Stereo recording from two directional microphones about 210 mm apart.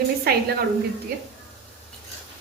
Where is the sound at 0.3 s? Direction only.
50° right (ahead or behind).